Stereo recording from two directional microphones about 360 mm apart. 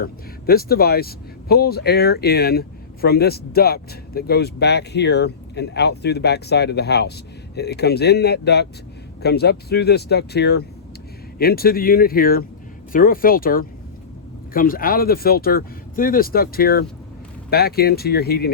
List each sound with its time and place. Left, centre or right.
0.0 s speech: left